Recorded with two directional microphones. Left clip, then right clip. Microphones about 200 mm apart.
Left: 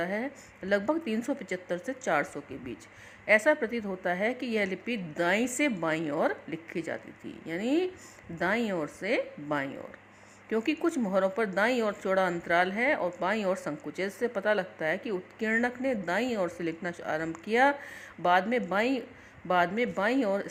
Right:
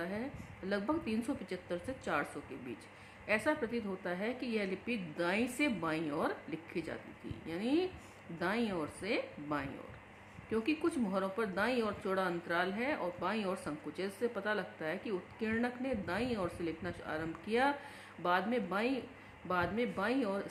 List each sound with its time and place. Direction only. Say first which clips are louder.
0.0 s a woman's voice: left 9 dB; 35° left (ahead or behind)